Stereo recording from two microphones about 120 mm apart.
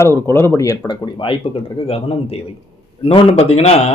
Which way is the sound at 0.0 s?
20° left (ahead or behind).